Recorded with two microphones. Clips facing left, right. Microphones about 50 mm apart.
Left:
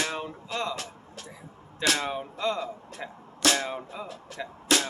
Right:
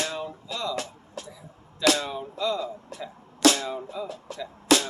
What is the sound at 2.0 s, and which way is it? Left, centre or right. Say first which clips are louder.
Speech: even; left.